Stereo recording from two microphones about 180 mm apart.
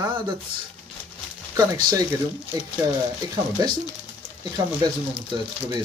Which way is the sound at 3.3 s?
20° right (ahead or behind).